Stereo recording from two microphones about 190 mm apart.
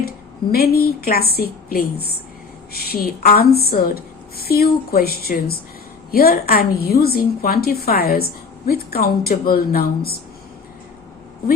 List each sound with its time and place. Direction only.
0.5 s a woman's voice: 55° left (ahead or behind)